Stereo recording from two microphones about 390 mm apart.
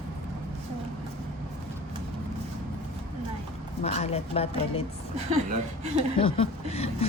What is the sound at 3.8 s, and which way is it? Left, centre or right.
A woman's voice, centre.